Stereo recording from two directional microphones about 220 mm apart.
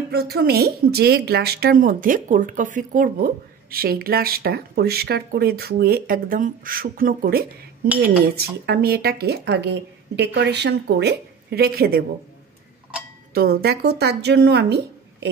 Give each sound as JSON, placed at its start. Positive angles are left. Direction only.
{"t": 0.1, "sound": "speech", "side_deg": -45}
{"t": 13.3, "sound": "speech", "side_deg": -45}